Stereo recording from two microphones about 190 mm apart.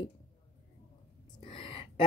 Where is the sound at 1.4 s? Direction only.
30° left (ahead or behind).